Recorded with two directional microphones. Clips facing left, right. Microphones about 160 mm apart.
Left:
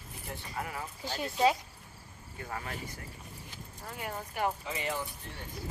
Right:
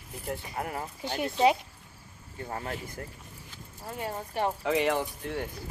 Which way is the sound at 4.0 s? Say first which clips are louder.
Right 3 dB; 30° right (ahead or behind).